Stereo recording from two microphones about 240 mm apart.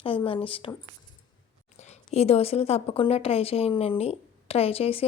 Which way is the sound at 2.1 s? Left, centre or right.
Left.